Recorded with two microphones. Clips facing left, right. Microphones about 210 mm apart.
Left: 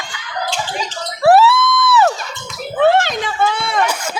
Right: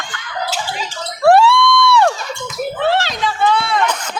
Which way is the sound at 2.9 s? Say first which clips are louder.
Left 2 dB; 50° left (ahead or behind).